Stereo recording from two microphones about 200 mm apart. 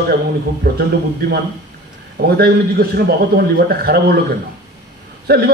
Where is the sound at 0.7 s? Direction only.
50° right (ahead or behind).